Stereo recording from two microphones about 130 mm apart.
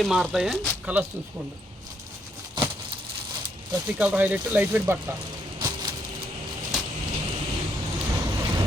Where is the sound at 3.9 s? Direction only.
10° right (ahead or behind).